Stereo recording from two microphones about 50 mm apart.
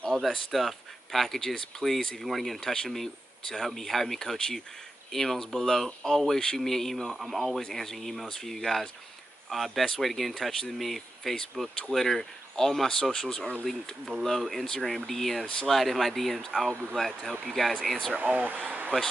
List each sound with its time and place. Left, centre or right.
0.1 s speech: centre
13.7 s speech: centre
18.1 s speech: right